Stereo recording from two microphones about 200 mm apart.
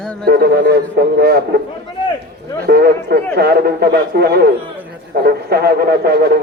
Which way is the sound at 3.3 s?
50° right (ahead or behind).